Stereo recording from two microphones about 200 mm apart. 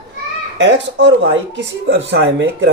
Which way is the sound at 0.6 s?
65° right (ahead or behind).